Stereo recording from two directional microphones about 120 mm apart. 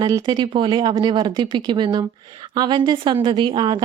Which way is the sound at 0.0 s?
35° right (ahead or behind).